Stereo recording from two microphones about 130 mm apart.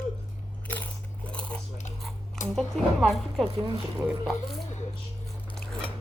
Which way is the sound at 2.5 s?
Centre (ahead or behind).